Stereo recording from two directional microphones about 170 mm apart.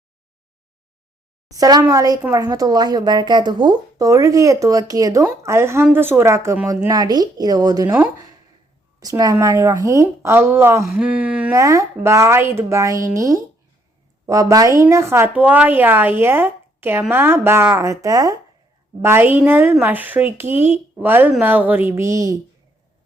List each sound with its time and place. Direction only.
1.5 s a woman's voice: 20° right (ahead or behind)
11.5 s a woman's voice: 20° right (ahead or behind)